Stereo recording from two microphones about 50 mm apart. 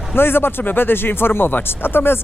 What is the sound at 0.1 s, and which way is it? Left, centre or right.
Speech, left.